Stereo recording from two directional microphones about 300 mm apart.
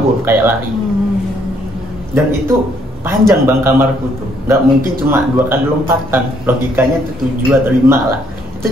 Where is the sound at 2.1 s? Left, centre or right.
Centre.